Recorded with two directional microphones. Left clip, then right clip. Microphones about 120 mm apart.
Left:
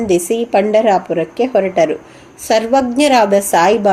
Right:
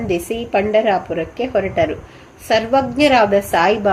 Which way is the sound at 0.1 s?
45° left (ahead or behind).